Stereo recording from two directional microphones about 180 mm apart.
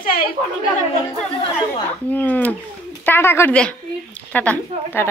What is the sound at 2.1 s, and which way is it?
Speech, 10° left (ahead or behind).